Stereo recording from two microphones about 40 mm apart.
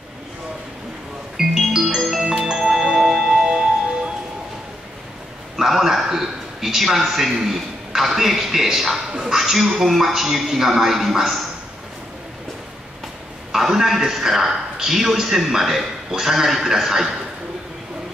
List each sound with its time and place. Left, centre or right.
1.3 s music: centre
2.3 s music: centre
2.6 s music: centre
3.3 s music: right
5.6 s a man's voice: centre
13.5 s a man's voice: centre